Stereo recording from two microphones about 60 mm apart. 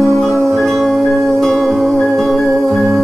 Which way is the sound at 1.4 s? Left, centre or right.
Centre.